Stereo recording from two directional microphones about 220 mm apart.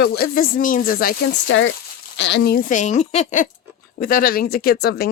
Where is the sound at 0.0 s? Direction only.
45° left (ahead or behind).